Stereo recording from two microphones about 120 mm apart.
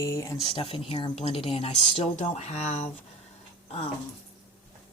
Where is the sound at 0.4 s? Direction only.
45° left (ahead or behind); by 2.9 s 75° left (ahead or behind).